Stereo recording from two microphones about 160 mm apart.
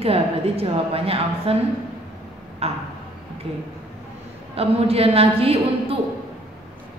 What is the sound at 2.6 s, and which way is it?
Speech, 40° right (ahead or behind).